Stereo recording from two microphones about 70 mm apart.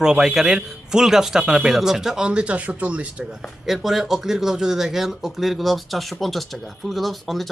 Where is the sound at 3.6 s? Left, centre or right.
Centre.